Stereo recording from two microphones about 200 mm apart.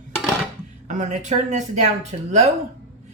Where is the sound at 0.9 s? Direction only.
40° right (ahead or behind).